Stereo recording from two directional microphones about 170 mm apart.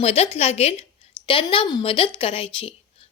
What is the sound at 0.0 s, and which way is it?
A woman's voice, 35° left (ahead or behind).